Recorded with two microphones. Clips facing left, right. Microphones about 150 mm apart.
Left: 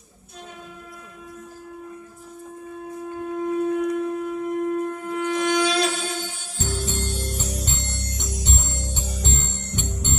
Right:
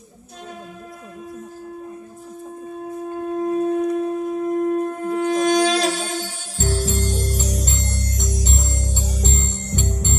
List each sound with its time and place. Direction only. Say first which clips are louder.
3.3 s wind instrument: right 3 dB; 35° right (ahead or behind)